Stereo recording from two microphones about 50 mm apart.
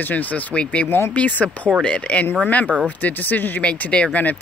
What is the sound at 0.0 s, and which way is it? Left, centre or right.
Speech, left.